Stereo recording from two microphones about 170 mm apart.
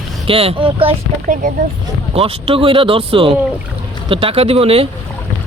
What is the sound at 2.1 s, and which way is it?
Speech, 35° right (ahead or behind).